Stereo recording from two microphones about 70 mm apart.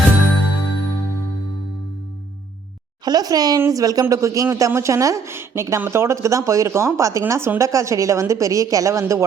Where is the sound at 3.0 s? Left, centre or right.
Right.